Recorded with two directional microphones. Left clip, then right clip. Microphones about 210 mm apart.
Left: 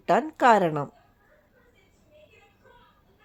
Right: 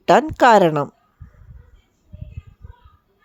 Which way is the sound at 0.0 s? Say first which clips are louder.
Right 8 dB; 45° right (ahead or behind).